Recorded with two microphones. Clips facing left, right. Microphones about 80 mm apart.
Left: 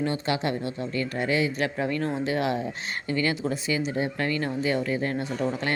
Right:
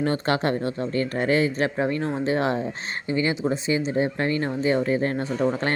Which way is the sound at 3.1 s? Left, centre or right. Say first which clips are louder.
Right 3 dB; right.